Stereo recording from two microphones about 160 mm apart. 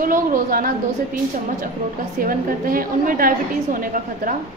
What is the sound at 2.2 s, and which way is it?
A woman's voice, 60° right (ahead or behind).